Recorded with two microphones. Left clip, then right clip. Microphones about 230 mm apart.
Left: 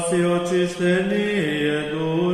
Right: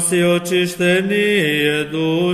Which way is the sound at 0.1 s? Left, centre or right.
Right.